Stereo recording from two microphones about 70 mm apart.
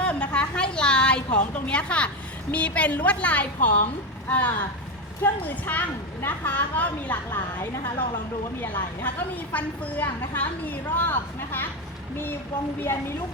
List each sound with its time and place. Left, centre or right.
0.0 s a sound: centre
2.5 s a woman's voice: centre
7.3 s a woman's voice: left
9.3 s a woman's voice: left
12.8 s a woman's voice: left